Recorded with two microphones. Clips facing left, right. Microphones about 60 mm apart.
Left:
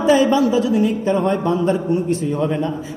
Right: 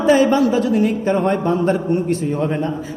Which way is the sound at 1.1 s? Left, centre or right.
Right.